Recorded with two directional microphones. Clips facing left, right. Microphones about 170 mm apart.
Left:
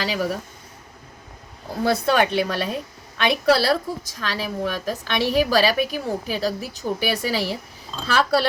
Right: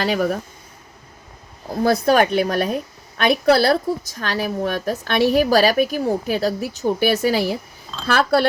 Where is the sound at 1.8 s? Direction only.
40° right (ahead or behind).